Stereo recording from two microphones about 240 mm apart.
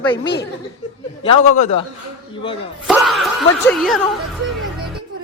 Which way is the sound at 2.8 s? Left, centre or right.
Centre.